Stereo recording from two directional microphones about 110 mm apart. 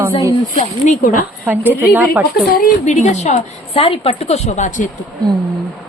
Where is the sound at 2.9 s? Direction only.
90° left; by 4.6 s 70° left (ahead or behind).